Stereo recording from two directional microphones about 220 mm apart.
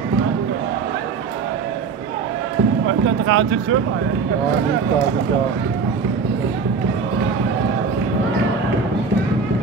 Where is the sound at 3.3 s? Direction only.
60° right (ahead or behind).